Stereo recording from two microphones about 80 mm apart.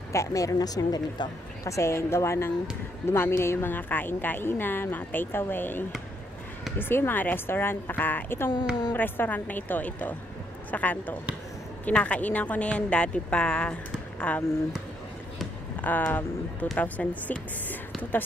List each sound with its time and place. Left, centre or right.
0.1 s speech: left
1.6 s a woman's voice: left; by 14.4 s centre
15.8 s speech: left